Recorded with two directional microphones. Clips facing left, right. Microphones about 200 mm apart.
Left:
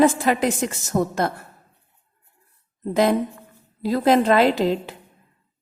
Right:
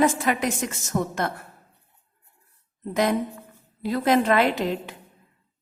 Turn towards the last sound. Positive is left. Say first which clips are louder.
# left 5 dB
turn(degrees=30)  # may be behind; listen again after turning